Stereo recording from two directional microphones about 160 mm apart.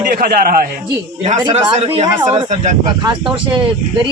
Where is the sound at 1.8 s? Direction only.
40° right (ahead or behind).